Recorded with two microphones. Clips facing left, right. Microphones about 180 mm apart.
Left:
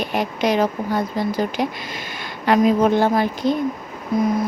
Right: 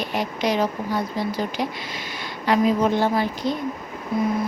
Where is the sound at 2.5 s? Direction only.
50° left (ahead or behind).